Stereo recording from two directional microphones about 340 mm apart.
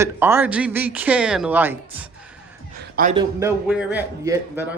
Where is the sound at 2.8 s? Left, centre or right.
Right.